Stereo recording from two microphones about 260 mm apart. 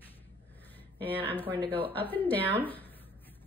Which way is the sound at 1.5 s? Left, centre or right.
Centre.